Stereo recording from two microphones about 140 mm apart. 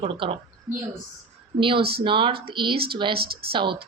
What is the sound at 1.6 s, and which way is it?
A woman's voice, 40° right (ahead or behind).